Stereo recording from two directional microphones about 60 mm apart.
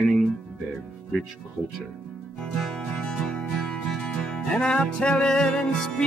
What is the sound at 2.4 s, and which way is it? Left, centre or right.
Music, centre.